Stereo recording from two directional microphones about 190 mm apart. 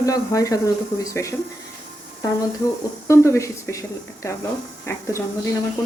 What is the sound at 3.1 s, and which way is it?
Speech, 15° left (ahead or behind).